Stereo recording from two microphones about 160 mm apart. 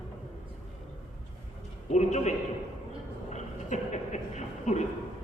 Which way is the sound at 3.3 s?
45° left (ahead or behind).